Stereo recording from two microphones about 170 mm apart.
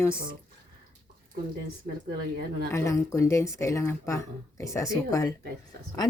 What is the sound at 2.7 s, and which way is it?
Speech, 15° left (ahead or behind).